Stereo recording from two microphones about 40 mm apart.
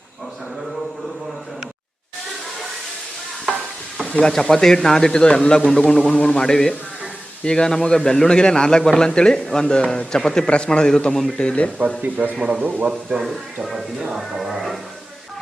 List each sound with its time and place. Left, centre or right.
4.2 s a man's voice: centre
11.1 s a man's voice: centre
11.3 s a man's voice: left
12.0 s speech: right
12.4 s speech: centre
13.2 s speech: centre